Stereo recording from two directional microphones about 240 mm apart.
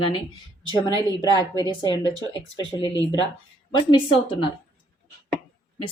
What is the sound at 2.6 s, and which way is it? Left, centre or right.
Speech, left.